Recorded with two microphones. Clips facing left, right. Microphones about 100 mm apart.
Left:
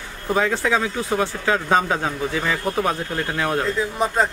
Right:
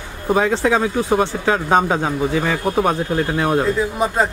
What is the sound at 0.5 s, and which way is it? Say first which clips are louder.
Speech: right 4 dB; 20° right (ahead or behind).